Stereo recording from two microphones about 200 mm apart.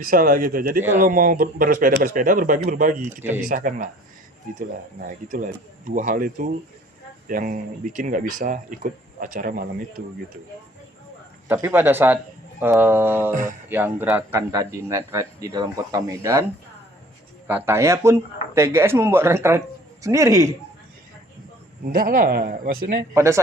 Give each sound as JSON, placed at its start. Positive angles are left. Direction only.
{"t": 0.0, "sound": "speech", "side_deg": -45}
{"t": 0.8, "sound": "speech", "side_deg": -10}
{"t": 1.0, "sound": "speech", "side_deg": -45}
{"t": 5.3, "sound": "speech", "side_deg": -40}
{"t": 11.4, "sound": "speech", "side_deg": -10}
{"t": 13.3, "sound": "speech", "side_deg": -40}
{"t": 13.7, "sound": "speech", "side_deg": -10}
{"t": 17.5, "sound": "speech", "side_deg": -15}
{"t": 21.8, "sound": "speech", "side_deg": -45}
{"t": 23.1, "sound": "speech", "side_deg": -15}